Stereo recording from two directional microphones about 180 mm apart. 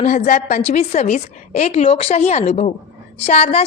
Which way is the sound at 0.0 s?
45° left (ahead or behind).